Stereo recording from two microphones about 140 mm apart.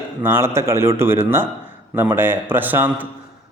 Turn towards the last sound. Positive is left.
turn(degrees=-10)  # may be behind; listen again after turning